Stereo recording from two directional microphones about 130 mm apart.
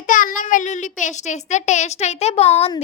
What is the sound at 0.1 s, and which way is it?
A child's voice, 85° left.